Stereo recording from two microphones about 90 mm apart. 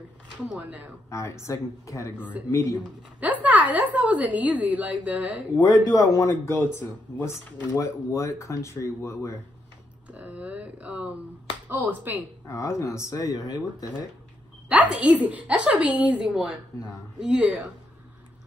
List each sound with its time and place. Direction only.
0.5 s a woman's voice: 15° right (ahead or behind)
1.1 s speech: 35° left (ahead or behind)
3.2 s a woman's voice: 15° right (ahead or behind)
5.6 s speech: 45° left (ahead or behind)
10.1 s a woman's voice: 15° right (ahead or behind)
12.4 s speech: 35° left (ahead or behind)
14.7 s a woman's voice: 15° right (ahead or behind)